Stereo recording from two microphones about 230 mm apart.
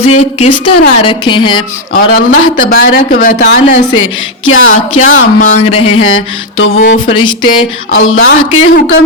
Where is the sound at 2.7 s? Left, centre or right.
Left.